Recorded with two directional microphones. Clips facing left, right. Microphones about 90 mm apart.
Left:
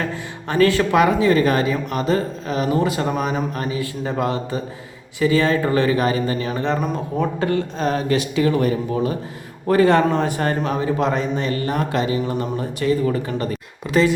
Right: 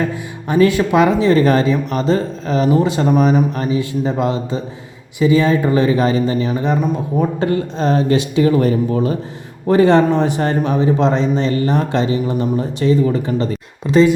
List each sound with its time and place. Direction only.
0.1 s speech: 15° right (ahead or behind)
7.2 s speech: 30° right (ahead or behind)